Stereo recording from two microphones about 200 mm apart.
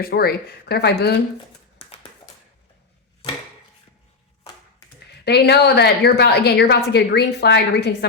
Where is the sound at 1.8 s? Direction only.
30° left (ahead or behind).